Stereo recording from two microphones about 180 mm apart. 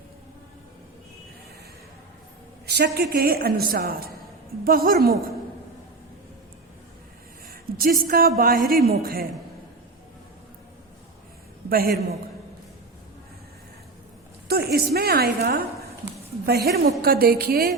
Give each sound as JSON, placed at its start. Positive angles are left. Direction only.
{"t": 2.6, "sound": "a woman's voice", "side_deg": -65}
{"t": 7.5, "sound": "a sound", "side_deg": -55}
{"t": 8.4, "sound": "a woman's voice", "side_deg": -50}
{"t": 11.7, "sound": "a woman's voice", "side_deg": -55}
{"t": 14.4, "sound": "a woman's voice", "side_deg": -60}